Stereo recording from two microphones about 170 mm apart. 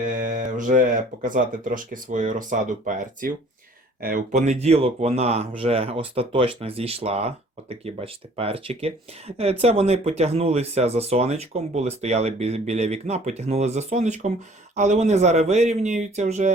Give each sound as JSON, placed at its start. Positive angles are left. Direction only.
{"t": 0.0, "sound": "mantra", "side_deg": -50}
{"t": 1.2, "sound": "speech", "side_deg": -50}